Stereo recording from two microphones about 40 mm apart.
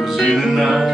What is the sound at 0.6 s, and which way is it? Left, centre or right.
Music, centre.